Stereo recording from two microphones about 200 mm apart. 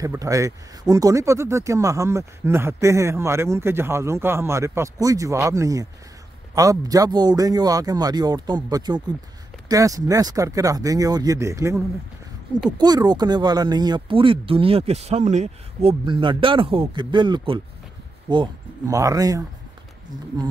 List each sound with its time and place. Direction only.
0.0 s speech: 15° right (ahead or behind)